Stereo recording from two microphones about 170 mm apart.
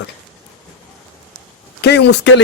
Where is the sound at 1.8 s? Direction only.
85° left.